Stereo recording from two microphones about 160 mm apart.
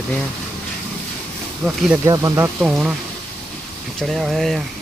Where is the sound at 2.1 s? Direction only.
20° right (ahead or behind).